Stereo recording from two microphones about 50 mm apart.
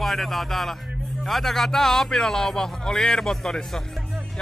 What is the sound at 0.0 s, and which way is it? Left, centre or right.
Speech, centre.